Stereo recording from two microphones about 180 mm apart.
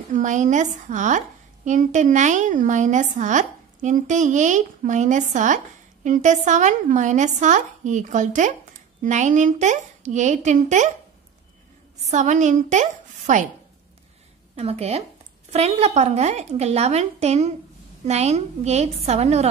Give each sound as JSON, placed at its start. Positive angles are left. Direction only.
{"t": 0.1, "sound": "a woman's voice", "side_deg": -45}
{"t": 12.1, "sound": "a woman's voice", "side_deg": -40}
{"t": 14.5, "sound": "a woman's voice", "side_deg": -35}